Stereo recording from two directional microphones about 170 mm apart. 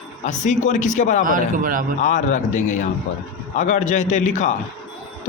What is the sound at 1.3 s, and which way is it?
Speech, 50° right (ahead or behind).